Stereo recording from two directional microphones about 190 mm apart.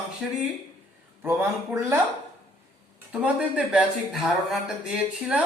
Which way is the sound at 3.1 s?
5° right (ahead or behind).